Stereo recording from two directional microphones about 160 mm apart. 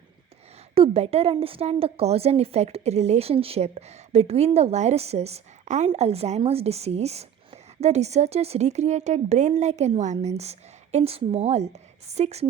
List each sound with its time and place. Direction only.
0.7 s a woman's voice: 40° right (ahead or behind)